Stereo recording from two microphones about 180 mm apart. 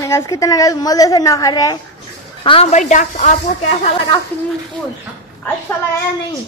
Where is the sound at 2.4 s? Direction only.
35° left (ahead or behind).